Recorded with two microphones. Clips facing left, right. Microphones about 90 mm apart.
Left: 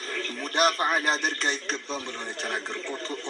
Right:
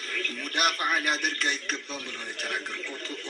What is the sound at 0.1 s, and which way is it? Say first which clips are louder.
A man's voice: left 2 dB; 30° left (ahead or behind).